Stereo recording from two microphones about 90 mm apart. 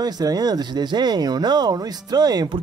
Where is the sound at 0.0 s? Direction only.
45° right (ahead or behind).